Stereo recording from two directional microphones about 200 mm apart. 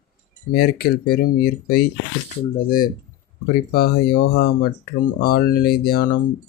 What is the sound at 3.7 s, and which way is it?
Speech, 50° left (ahead or behind).